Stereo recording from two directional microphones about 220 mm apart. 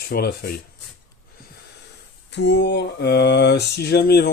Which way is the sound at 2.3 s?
50° left (ahead or behind).